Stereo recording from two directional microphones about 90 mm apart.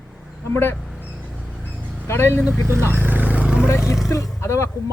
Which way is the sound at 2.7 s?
25° right (ahead or behind).